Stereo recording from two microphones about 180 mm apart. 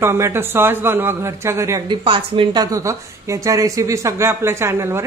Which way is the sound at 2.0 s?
30° right (ahead or behind).